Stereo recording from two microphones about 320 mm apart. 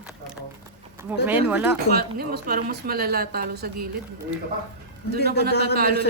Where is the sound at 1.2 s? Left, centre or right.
Centre.